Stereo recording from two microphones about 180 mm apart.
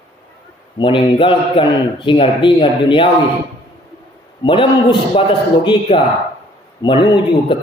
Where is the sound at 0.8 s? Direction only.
25° left (ahead or behind).